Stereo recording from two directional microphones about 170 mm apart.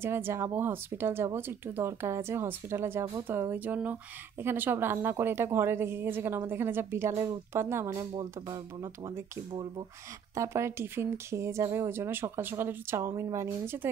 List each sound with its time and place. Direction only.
0.0 s speech: 15° right (ahead or behind)
10.3 s speech: 15° right (ahead or behind)